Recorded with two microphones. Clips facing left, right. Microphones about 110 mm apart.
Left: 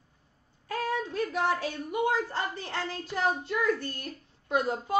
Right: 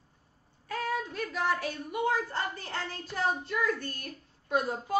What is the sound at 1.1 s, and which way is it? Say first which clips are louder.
A woman's voice: left 3 dB; 25° left (ahead or behind).